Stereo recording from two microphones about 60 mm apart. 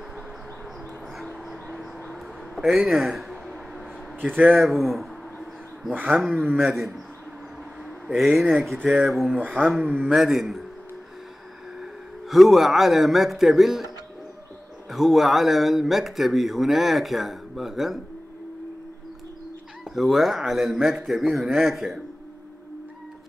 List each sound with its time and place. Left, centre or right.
1.1 s a sound: centre
4.2 s speech: right
4.6 s a sound: centre
5.9 s speech: right
6.6 s speech: centre
8.4 s speech: centre
9.4 s speech: right
10.1 s speech: centre
11.8 s a man's voice: centre
14.9 s speech: centre
19.9 s speech: centre